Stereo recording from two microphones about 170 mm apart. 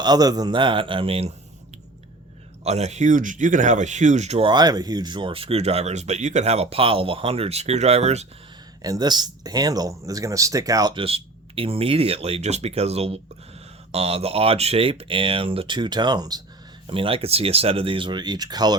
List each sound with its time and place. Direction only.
0.0 s speech: 25° right (ahead or behind)
2.6 s speech: 40° right (ahead or behind)
8.8 s speech: 25° right (ahead or behind)